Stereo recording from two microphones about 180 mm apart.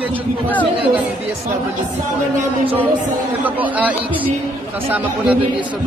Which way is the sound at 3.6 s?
10° right (ahead or behind).